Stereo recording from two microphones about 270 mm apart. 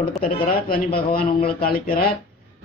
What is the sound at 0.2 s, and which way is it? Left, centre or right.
Speech, left.